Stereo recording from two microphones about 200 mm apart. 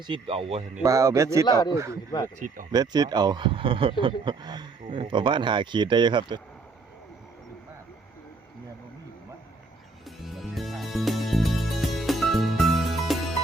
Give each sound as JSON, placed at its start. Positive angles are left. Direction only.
{"t": 0.1, "sound": "speech", "side_deg": -30}
{"t": 0.8, "sound": "a man's voice", "side_deg": -15}
{"t": 1.5, "sound": "speech", "side_deg": 20}
{"t": 1.7, "sound": "a man's voice", "side_deg": -15}
{"t": 10.2, "sound": "music", "side_deg": 0}